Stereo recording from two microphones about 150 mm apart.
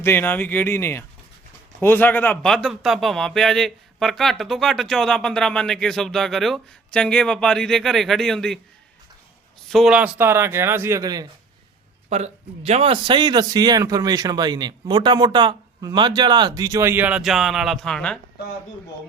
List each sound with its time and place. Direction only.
0.0 s speech: 15° left (ahead or behind)
9.6 s speech: centre (ahead or behind); by 11.3 s 25° right (ahead or behind)
12.0 s a man's voice: 45° right (ahead or behind); by 18.2 s 5° left (ahead or behind)